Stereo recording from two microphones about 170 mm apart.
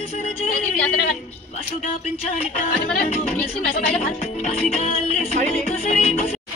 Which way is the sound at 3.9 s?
40° left (ahead or behind).